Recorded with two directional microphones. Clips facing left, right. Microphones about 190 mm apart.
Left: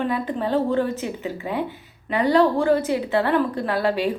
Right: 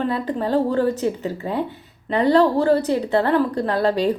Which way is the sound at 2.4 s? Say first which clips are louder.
Right 1 dB; 35° right (ahead or behind).